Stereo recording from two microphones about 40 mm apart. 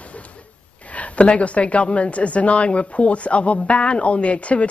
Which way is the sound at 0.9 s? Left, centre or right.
Left.